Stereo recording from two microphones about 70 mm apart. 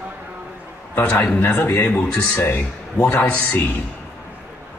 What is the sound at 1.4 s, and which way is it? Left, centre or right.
Speech, left.